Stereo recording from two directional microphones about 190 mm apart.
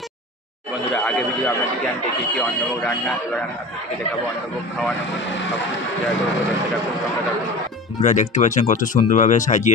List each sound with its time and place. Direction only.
1.0 s speech: 5° left (ahead or behind)
8.0 s speech: 40° left (ahead or behind)